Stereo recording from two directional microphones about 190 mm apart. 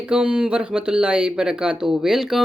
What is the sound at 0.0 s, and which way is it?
Speech, 5° right (ahead or behind).